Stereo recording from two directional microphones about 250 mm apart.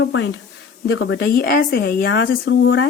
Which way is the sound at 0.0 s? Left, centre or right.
Left.